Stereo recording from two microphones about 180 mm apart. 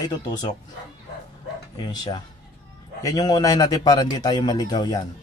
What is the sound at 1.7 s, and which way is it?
Speech, 25° left (ahead or behind).